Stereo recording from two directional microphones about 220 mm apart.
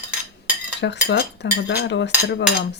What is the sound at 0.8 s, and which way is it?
Speech, 50° left (ahead or behind).